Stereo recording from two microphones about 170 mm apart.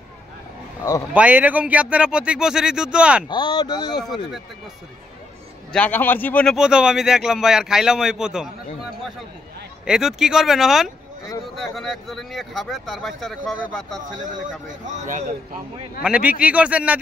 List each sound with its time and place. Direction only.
1.1 s speech: 10° right (ahead or behind)
3.3 s speech: 25° left (ahead or behind)
5.7 s a man's voice: 10° left (ahead or behind)
6.5 s speech: 5° right (ahead or behind)
14.7 s speech: 45° right (ahead or behind)
16.0 s speech: 5° right (ahead or behind)